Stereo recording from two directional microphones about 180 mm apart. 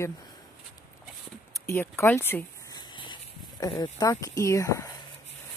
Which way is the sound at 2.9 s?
25° left (ahead or behind).